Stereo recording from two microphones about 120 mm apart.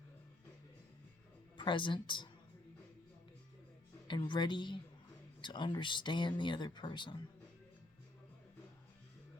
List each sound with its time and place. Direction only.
1.5 s speech: 40° left (ahead or behind)
4.1 s speech: 40° left (ahead or behind)